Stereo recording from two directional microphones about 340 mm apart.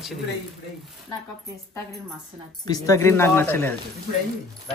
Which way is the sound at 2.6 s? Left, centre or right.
Centre.